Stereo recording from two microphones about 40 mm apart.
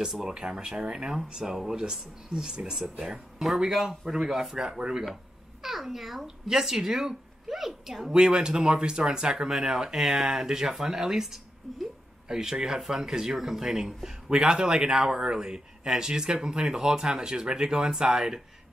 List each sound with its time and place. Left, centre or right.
0.3 s a child's voice: centre
8.1 s speech: right
12.3 s speech: centre